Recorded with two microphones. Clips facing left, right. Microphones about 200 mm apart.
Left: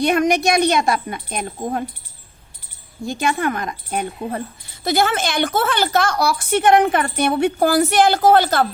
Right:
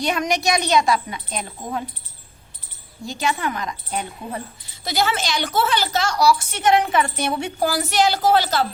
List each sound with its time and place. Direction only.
0.0 s a woman's voice: 55° left (ahead or behind)
3.1 s a woman's voice: 55° left (ahead or behind)